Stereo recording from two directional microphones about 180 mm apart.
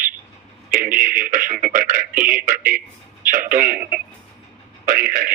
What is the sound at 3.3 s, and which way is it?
Radio, 50° right (ahead or behind).